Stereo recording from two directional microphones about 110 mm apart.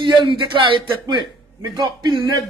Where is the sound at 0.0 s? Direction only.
45° right (ahead or behind).